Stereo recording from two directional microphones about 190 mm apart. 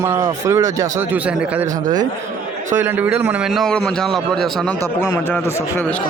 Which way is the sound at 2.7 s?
10° right (ahead or behind).